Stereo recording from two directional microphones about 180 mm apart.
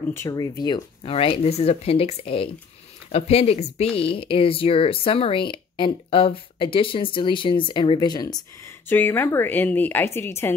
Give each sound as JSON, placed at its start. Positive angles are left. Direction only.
{"t": 0.1, "sound": "speech", "side_deg": 15}
{"t": 8.8, "sound": "a woman's voice", "side_deg": 10}